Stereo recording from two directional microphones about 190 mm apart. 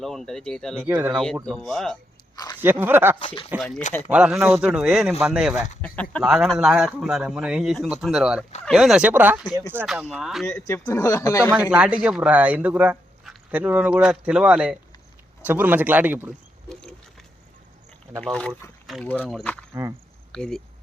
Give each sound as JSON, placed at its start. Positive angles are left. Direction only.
{"t": 0.0, "sound": "speech", "side_deg": 0}
{"t": 0.8, "sound": "speech", "side_deg": -10}
{"t": 1.5, "sound": "speech", "side_deg": 0}
{"t": 2.3, "sound": "speech", "side_deg": 20}
{"t": 2.6, "sound": "speech", "side_deg": -10}
{"t": 3.2, "sound": "speech", "side_deg": 30}
{"t": 4.1, "sound": "speech", "side_deg": -5}
{"t": 5.5, "sound": "speech", "side_deg": 40}
{"t": 5.8, "sound": "speech", "side_deg": 5}
{"t": 10.4, "sound": "speech", "side_deg": 15}
{"t": 11.5, "sound": "speech", "side_deg": -5}
{"t": 18.2, "sound": "speech", "side_deg": 5}
{"t": 19.7, "sound": "speech", "side_deg": -15}
{"t": 20.3, "sound": "speech", "side_deg": 5}